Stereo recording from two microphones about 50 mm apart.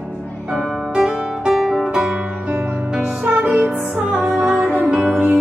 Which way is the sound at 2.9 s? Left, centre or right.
Right.